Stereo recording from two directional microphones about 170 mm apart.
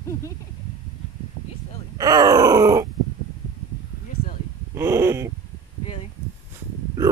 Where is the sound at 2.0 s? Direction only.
20° right (ahead or behind).